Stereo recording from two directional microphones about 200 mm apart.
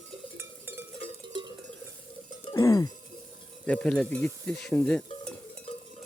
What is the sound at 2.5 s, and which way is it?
Music, 15° left (ahead or behind).